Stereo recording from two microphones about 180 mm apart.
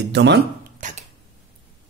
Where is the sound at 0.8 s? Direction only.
45° right (ahead or behind).